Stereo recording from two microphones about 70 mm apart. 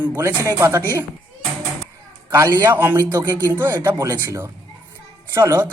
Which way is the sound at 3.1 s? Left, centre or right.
Right.